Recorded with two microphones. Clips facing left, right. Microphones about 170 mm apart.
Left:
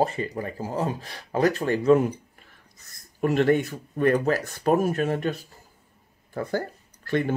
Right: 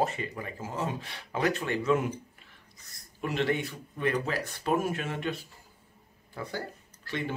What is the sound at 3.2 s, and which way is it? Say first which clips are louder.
Speech: left 8 dB; 45° left (ahead or behind).